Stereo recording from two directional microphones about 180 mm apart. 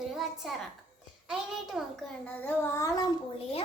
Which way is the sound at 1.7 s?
5° right (ahead or behind).